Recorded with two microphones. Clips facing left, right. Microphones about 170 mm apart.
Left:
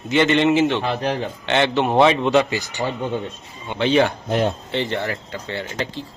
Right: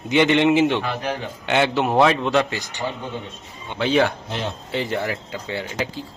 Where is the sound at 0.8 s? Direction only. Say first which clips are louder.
Left 3 dB; 35° left (ahead or behind).